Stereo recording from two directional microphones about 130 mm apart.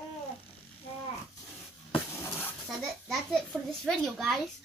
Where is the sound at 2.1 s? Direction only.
20° left (ahead or behind).